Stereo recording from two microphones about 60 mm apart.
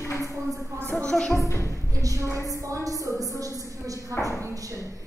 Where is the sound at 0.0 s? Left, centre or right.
Left.